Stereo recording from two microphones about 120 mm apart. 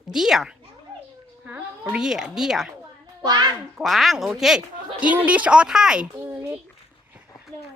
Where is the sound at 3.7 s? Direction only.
Centre (ahead or behind).